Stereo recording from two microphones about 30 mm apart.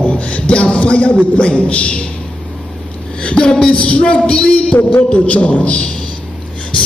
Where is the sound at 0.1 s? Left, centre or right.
Left.